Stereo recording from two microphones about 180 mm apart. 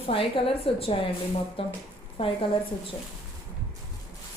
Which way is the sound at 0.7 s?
30° left (ahead or behind).